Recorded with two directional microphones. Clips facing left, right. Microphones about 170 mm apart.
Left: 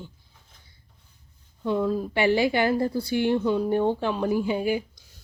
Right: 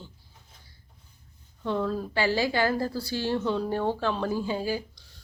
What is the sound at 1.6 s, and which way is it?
Speech, 10° left (ahead or behind).